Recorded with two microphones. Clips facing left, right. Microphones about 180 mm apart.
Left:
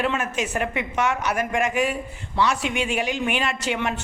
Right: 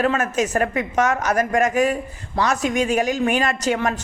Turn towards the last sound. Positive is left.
turn(degrees=-40)  # may be behind; listen again after turning